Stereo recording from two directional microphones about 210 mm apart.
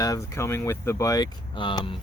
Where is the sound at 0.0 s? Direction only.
15° left (ahead or behind).